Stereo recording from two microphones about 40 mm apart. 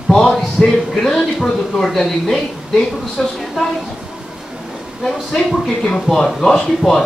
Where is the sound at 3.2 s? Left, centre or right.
Centre.